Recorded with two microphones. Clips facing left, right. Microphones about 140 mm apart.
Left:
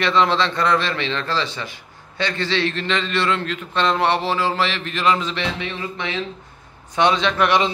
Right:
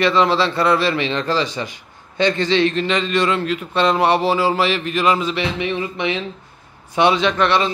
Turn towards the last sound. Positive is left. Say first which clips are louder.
# right 1 dB
turn(degrees=15)  # may be behind; listen again after turning